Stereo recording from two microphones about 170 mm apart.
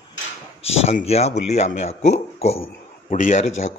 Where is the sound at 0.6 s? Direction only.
35° left (ahead or behind).